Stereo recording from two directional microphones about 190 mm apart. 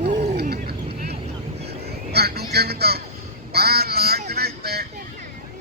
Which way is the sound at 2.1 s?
55° right (ahead or behind).